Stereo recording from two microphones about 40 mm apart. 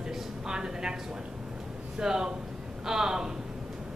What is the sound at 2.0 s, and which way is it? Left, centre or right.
A man's voice, centre.